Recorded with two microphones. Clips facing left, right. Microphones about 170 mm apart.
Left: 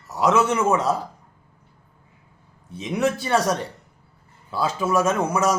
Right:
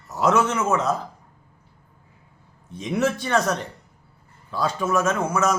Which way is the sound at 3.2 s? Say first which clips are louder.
Left 1 dB; 10° left (ahead or behind).